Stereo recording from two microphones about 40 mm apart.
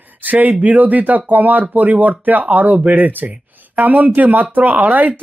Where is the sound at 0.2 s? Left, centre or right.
Right.